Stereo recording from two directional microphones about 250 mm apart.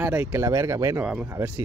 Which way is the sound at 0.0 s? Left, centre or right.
Centre.